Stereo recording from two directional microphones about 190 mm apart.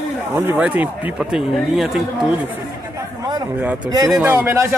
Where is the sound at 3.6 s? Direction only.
10° right (ahead or behind).